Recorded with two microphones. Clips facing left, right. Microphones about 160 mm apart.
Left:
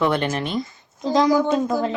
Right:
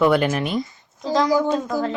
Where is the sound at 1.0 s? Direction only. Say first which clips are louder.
Left 1 dB; 15° left (ahead or behind).